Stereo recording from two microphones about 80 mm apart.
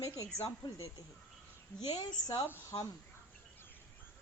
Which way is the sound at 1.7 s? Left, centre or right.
Left.